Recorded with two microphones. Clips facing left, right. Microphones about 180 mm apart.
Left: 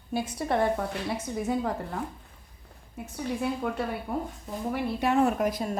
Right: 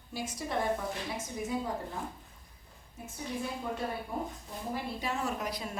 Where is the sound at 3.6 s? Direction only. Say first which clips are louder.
Left 5 dB; 70° left (ahead or behind).